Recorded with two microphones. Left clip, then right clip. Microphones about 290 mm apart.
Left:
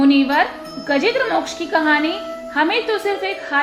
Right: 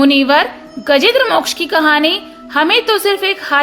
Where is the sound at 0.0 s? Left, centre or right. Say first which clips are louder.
Right 5 dB; right.